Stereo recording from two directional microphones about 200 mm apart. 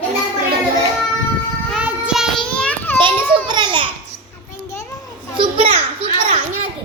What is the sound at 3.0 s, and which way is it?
Speech, 25° right (ahead or behind).